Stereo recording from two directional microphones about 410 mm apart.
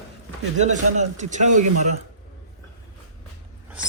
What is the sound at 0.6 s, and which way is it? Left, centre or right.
A man's voice, centre.